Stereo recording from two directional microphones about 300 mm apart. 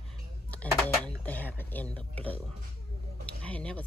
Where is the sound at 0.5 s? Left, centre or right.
Centre.